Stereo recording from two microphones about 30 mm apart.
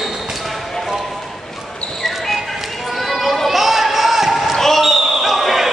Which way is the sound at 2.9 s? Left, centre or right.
Centre.